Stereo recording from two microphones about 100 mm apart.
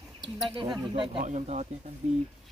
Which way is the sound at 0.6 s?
55° right (ahead or behind).